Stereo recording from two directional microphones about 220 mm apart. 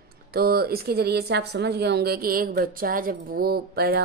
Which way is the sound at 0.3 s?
45° right (ahead or behind).